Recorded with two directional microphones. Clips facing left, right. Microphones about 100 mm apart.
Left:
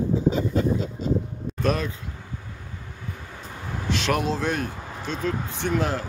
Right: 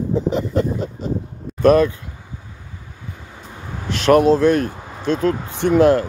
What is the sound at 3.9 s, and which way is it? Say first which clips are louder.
Speech: right 12 dB; 50° right (ahead or behind).